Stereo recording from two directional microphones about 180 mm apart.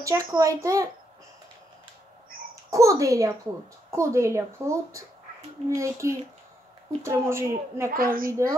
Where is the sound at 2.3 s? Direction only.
50° right (ahead or behind).